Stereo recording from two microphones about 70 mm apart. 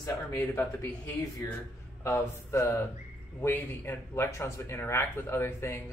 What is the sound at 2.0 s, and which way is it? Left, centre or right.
Speech, left.